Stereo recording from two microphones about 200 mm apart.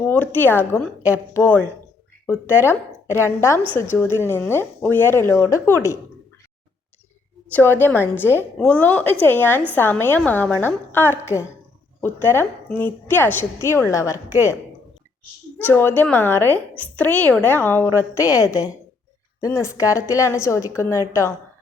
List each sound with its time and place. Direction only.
0.0 s a woman's voice: 10° left (ahead or behind)
7.5 s a woman's voice: 10° left (ahead or behind)
15.5 s a woman's voice: 10° left (ahead or behind)